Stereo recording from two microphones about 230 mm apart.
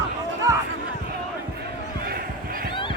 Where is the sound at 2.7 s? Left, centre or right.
Left.